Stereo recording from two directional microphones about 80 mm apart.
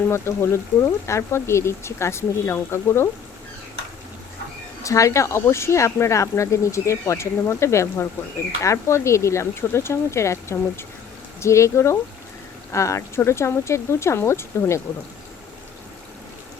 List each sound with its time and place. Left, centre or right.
0.1 s speech: left
4.8 s speech: left